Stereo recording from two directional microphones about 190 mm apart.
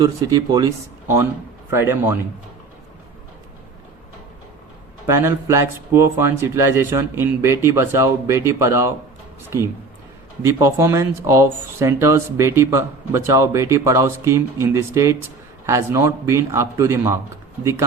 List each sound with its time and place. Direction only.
0.0 s speech: 20° right (ahead or behind)
5.0 s speech: 15° right (ahead or behind)
10.4 s speech: 15° right (ahead or behind)